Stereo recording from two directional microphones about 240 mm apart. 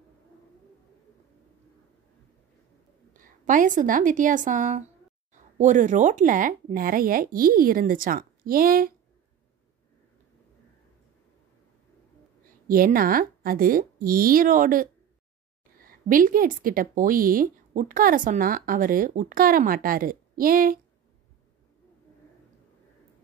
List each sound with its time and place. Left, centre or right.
3.1 s a woman's voice: right
12.6 s a woman's voice: right